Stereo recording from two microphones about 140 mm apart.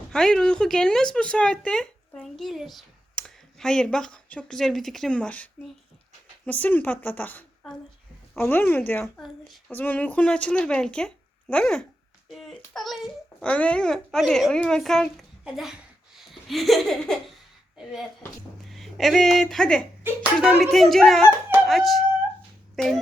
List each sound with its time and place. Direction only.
0.1 s a woman's voice: 5° left (ahead or behind)
16.1 s a sound: centre (ahead or behind)
18.2 s a woman's voice: 15° left (ahead or behind)
18.7 s speech: centre (ahead or behind)
20.1 s speech: 10° right (ahead or behind)
20.6 s speech: centre (ahead or behind)
22.7 s a sound: centre (ahead or behind)